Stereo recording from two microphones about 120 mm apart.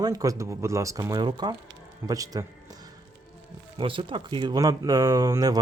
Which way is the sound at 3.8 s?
45° right (ahead or behind).